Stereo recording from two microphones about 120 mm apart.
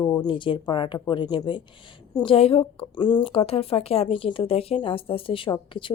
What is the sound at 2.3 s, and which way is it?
A woman's voice, 55° left (ahead or behind).